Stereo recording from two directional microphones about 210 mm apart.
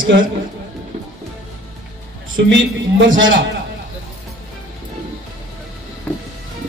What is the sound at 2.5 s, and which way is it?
Speech, 65° right (ahead or behind).